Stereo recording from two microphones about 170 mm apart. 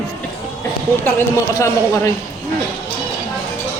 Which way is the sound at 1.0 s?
15° left (ahead or behind).